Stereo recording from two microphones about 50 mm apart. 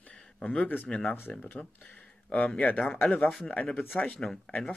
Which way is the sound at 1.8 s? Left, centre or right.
Left.